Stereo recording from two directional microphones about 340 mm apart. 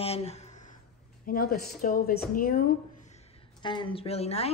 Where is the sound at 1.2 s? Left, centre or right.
Left.